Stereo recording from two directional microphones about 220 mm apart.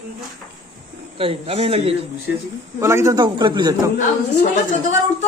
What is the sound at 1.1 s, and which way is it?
Speech, 25° right (ahead or behind).